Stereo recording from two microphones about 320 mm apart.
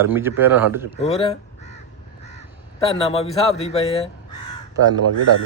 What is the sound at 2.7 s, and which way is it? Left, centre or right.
Speech, centre.